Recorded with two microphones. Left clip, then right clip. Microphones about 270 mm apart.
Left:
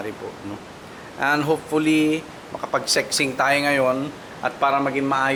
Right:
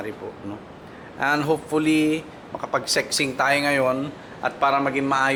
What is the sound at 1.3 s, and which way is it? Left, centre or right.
Speech, centre.